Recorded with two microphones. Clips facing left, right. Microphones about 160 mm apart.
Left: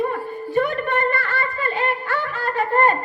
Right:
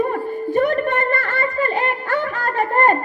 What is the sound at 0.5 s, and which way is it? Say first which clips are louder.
Music: right 2 dB; 45° right (ahead or behind).